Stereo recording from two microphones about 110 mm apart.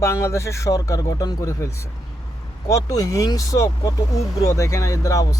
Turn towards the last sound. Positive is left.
turn(degrees=30)  # may be behind; listen again after turning